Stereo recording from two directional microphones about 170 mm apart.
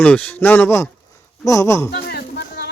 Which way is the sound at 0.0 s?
10° left (ahead or behind).